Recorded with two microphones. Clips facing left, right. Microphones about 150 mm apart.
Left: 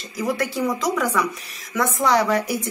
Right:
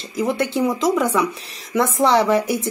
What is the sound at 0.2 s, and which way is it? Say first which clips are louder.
A woman's voice: right 3 dB; 25° right (ahead or behind).